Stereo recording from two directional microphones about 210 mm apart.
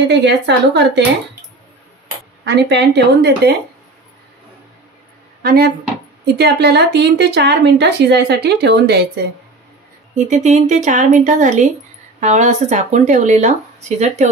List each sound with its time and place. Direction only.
0.1 s a woman's voice: 55° right (ahead or behind)
2.4 s a woman's voice: 55° right (ahead or behind)
5.4 s a woman's voice: 45° right (ahead or behind)
10.1 s speech: 35° right (ahead or behind)